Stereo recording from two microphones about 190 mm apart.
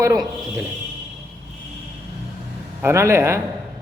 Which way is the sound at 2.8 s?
15° right (ahead or behind).